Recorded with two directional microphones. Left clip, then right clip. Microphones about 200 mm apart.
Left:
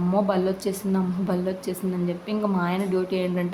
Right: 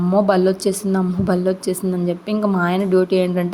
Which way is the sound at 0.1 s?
30° right (ahead or behind).